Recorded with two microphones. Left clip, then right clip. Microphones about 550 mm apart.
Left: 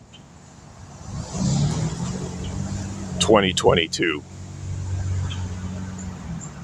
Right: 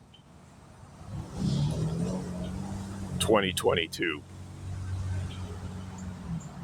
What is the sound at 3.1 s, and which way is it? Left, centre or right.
Speech, right.